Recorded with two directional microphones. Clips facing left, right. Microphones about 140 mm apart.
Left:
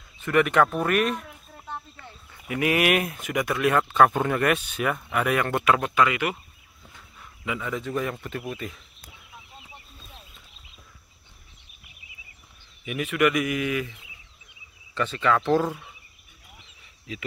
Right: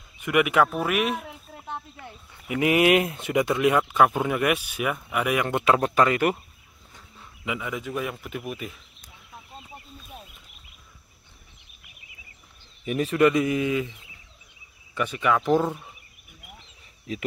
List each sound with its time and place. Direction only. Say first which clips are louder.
0.2 s speech: even; 10° right (ahead or behind)
1.2 s speech: right 3 dB; 15° right (ahead or behind)
5.8 s speech: right 2 dB; 40° right (ahead or behind)
7.2 s a man's voice: even; 15° right (ahead or behind)
12.8 s speech: right 3 dB; 35° right (ahead or behind)
15.0 s speech: even; 10° right (ahead or behind)